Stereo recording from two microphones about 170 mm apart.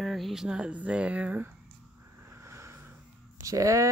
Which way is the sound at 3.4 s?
20° right (ahead or behind).